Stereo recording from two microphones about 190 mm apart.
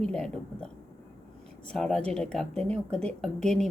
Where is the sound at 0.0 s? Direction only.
5° left (ahead or behind).